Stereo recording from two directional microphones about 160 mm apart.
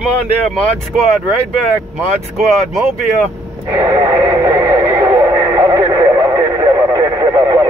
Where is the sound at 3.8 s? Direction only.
20° right (ahead or behind).